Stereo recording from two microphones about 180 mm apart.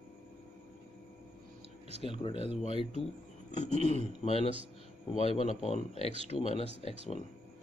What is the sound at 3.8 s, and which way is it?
Speech, 40° right (ahead or behind).